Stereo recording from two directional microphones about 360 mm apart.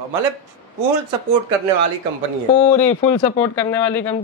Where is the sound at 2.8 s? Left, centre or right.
Centre.